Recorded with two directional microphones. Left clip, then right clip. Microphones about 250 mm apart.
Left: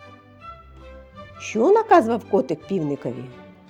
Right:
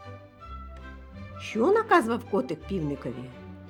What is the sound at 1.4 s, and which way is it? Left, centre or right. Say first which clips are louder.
Speech: left 6 dB; centre.